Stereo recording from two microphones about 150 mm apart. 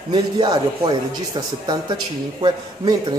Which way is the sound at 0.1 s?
30° right (ahead or behind).